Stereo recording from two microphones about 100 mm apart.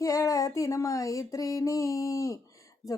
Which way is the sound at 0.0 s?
35° left (ahead or behind).